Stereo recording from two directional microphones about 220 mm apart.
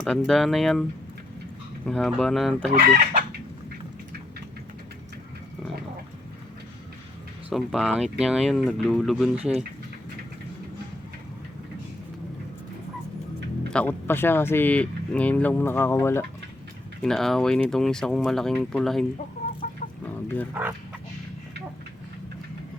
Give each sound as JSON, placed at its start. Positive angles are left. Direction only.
{"t": 0.0, "sound": "speech", "side_deg": 5}
{"t": 2.8, "sound": "chicken", "side_deg": -40}
{"t": 7.5, "sound": "speech", "side_deg": 0}
{"t": 13.7, "sound": "speech", "side_deg": 5}
{"t": 20.2, "sound": "speech", "side_deg": 5}
{"t": 20.5, "sound": "speech", "side_deg": -10}